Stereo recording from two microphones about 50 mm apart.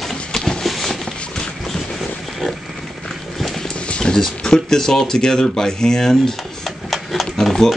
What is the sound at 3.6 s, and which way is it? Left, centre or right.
Speech, centre.